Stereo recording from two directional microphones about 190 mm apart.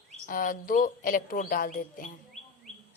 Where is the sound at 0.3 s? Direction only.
45° left (ahead or behind).